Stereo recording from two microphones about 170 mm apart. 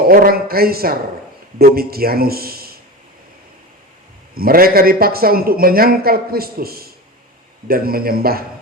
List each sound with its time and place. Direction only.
0.1 s a man's voice: 60° right (ahead or behind)
4.4 s a man's voice: 60° right (ahead or behind)